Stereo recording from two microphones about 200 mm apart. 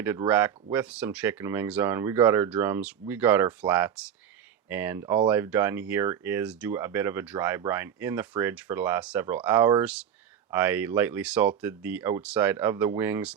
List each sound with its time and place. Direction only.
0.3 s speech: 10° right (ahead or behind)